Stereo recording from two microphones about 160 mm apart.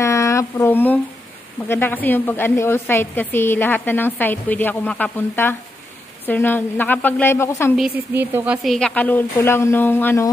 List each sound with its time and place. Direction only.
0.0 s a sound: 20° left (ahead or behind)
1.7 s a woman's voice: 15° left (ahead or behind)
8.1 s speech: 15° right (ahead or behind)
8.6 s a woman's voice: 5° left (ahead or behind)